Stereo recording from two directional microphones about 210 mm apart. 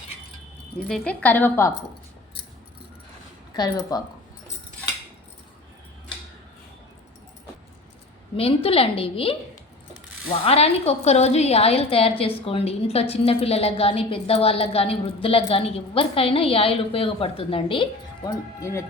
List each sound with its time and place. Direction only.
0.9 s a woman's voice: 5° left (ahead or behind)
3.5 s a woman's voice: 20° left (ahead or behind)
8.4 s a woman's voice: 25° left (ahead or behind)
10.4 s a woman's voice: 30° left (ahead or behind)
18.3 s a woman's voice: 15° left (ahead or behind)